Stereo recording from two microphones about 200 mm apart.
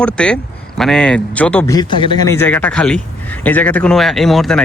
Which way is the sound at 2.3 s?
10° left (ahead or behind).